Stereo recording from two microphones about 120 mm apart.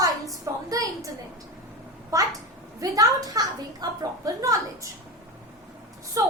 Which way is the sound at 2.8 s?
30° right (ahead or behind).